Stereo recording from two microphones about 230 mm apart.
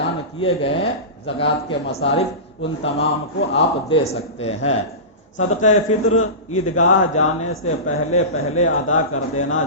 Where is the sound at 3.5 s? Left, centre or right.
Left.